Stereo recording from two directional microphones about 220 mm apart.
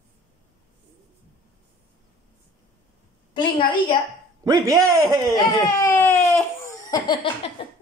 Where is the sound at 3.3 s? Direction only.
20° left (ahead or behind).